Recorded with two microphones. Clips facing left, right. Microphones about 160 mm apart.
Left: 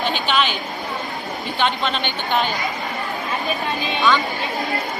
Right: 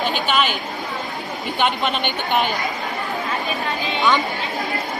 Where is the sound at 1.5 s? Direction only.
10° right (ahead or behind).